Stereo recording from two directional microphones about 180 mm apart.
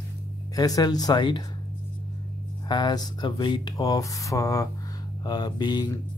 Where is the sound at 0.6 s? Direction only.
20° left (ahead or behind).